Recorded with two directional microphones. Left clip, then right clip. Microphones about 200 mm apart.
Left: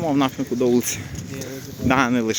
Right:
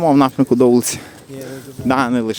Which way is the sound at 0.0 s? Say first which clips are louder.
Right 8 dB; 35° right (ahead or behind).